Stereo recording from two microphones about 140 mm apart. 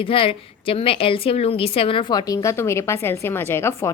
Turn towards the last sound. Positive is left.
turn(degrees=20)  # may be behind; listen again after turning